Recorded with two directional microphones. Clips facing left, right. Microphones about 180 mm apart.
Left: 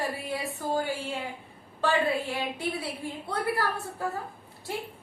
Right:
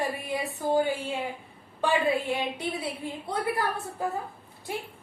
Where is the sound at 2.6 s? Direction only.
20° right (ahead or behind).